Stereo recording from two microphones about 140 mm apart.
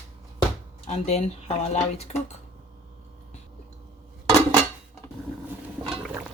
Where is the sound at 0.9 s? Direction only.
50° left (ahead or behind).